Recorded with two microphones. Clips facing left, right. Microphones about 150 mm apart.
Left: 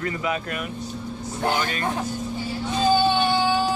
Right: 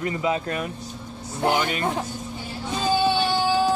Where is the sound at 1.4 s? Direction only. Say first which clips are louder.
Right 2 dB; 20° right (ahead or behind).